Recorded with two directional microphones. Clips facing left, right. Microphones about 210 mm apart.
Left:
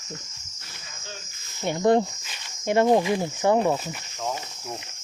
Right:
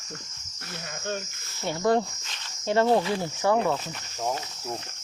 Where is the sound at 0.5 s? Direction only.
60° right (ahead or behind).